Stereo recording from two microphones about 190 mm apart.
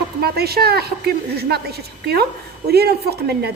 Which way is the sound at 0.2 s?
55° right (ahead or behind).